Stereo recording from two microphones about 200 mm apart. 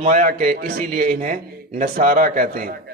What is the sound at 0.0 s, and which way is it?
A man's voice, 40° right (ahead or behind).